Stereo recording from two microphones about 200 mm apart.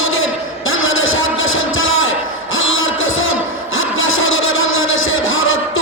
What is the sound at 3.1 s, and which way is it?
Music, 85° left.